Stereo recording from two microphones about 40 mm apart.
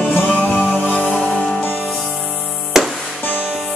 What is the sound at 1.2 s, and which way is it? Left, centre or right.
Music, left.